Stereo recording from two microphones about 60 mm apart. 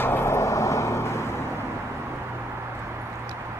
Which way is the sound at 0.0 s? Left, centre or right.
Left.